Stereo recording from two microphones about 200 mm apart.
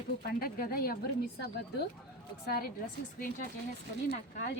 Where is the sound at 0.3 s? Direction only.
50° left (ahead or behind).